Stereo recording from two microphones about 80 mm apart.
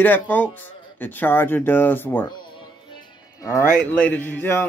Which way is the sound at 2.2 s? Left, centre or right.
Left.